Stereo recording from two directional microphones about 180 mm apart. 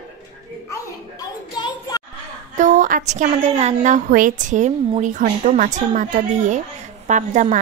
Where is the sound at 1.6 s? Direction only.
20° left (ahead or behind).